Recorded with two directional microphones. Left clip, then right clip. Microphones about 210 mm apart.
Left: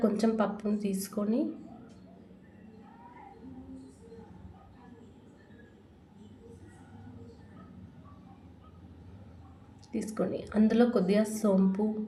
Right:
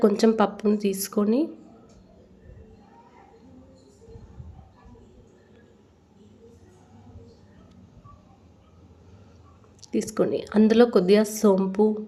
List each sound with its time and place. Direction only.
0.0 s a woman's voice: 40° right (ahead or behind)
9.8 s a woman's voice: 40° right (ahead or behind)